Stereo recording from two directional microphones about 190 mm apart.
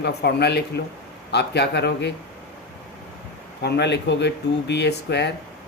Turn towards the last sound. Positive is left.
turn(degrees=65)  # may be behind; listen again after turning